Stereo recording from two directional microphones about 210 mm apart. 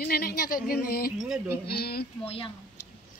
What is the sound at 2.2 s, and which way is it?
Speech, 25° left (ahead or behind).